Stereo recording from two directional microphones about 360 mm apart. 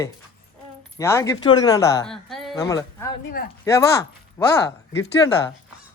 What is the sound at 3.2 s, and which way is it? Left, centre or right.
Speech, left.